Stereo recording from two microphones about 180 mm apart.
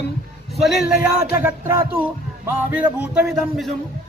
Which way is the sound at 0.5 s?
Centre (ahead or behind).